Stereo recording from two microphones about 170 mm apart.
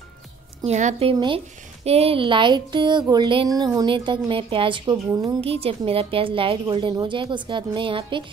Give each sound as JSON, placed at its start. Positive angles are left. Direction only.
{"t": 0.7, "sound": "speech", "side_deg": -40}